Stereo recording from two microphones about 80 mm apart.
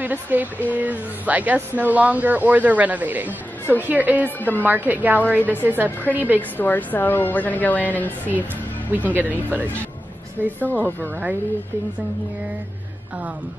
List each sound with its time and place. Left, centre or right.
0.0 s speech: right
4.4 s a woman's voice: left
4.6 s speech: right
6.5 s a woman's voice: left
9.1 s speech: right